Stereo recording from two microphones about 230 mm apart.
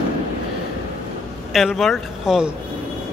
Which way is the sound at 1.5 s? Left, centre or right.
Centre.